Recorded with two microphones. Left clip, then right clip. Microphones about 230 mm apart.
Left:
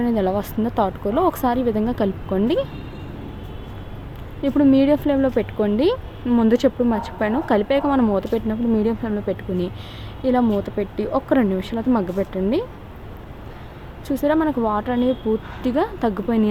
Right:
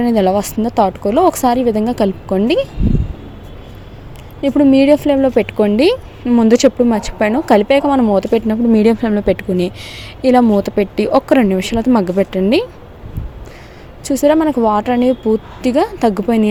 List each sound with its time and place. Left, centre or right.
0.0 s speech: right
4.4 s speech: right
14.1 s speech: right